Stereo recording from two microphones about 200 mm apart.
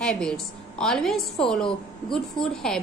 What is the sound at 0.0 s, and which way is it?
A woman's voice, 5° left (ahead or behind).